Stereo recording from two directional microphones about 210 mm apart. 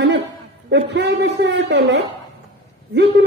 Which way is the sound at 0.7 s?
55° right (ahead or behind).